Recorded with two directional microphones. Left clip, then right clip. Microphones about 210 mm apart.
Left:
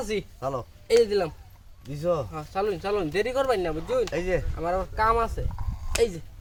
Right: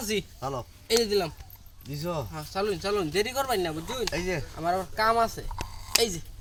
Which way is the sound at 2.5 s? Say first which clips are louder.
Left 1 dB; 20° left (ahead or behind).